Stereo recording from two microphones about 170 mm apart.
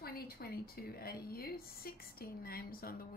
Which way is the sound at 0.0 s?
65° left (ahead or behind).